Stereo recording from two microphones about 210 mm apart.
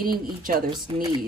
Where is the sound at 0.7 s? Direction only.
20° right (ahead or behind).